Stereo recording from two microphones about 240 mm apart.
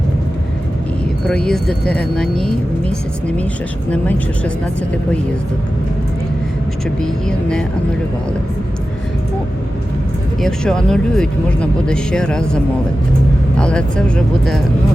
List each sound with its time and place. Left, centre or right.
1.3 s speech: centre
3.9 s speech: centre
7.0 s speech: centre
10.4 s speech: centre